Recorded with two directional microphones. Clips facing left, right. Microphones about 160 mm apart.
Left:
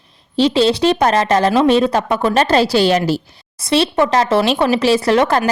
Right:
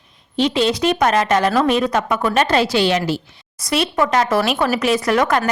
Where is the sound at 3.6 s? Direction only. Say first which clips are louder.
Left 4 dB; 25° left (ahead or behind).